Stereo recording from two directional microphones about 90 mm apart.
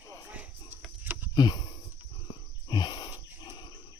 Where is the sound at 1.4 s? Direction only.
55° left (ahead or behind).